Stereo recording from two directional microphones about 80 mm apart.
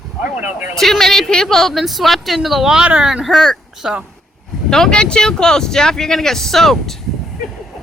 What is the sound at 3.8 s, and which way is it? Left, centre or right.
Speech, centre.